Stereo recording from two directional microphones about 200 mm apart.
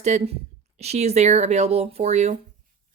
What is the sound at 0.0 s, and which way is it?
Speech, 35° right (ahead or behind).